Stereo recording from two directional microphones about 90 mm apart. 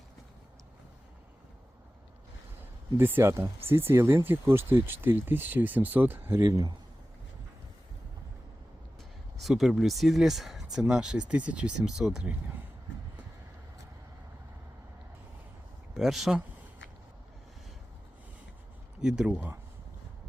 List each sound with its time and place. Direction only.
3.0 s speech: 25° right (ahead or behind)
6.4 s speech: 40° right (ahead or behind)
9.4 s speech: centre (ahead or behind)
16.0 s speech: 5° right (ahead or behind)
19.0 s speech: 10° right (ahead or behind)
19.3 s speech: 20° right (ahead or behind)